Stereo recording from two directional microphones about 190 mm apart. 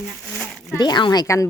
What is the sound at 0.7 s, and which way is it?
Speech, 20° left (ahead or behind).